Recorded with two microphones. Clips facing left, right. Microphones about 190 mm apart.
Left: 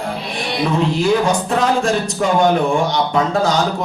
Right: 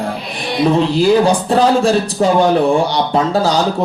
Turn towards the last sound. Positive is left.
turn(degrees=-35)  # may be behind; listen again after turning